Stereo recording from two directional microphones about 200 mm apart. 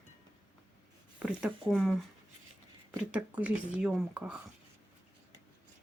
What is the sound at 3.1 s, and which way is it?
Speech, 5° right (ahead or behind).